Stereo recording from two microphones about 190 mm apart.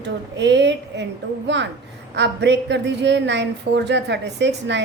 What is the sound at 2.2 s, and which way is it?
A woman's voice, 65° right (ahead or behind).